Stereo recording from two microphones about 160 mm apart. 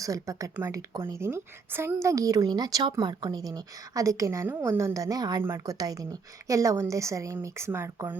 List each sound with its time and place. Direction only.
0.0 s a woman's voice: 20° right (ahead or behind)